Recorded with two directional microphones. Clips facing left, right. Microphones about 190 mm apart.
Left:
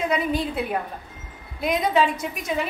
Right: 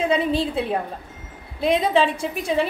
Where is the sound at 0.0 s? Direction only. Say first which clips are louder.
Right 3 dB; 30° right (ahead or behind).